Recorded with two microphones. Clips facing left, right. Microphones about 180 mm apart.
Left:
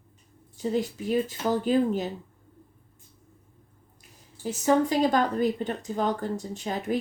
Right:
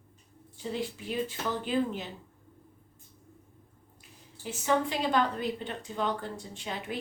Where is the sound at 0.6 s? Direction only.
40° left (ahead or behind).